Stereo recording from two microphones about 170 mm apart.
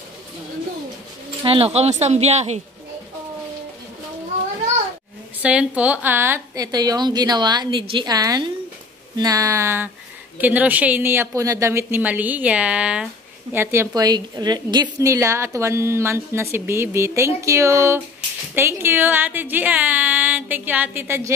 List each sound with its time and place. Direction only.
1.4 s speech: 35° right (ahead or behind)
5.4 s a woman's voice: 5° right (ahead or behind)